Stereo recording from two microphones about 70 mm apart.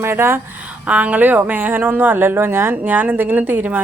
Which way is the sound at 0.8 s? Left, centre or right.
Centre.